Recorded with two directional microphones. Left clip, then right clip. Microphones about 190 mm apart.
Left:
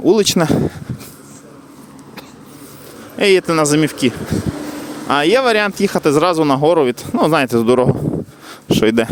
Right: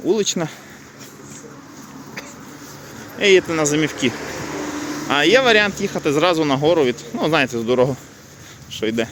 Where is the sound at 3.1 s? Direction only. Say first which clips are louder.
Left 2 dB; 40° left (ahead or behind).